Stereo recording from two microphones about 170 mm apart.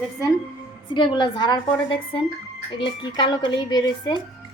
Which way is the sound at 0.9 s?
25° left (ahead or behind).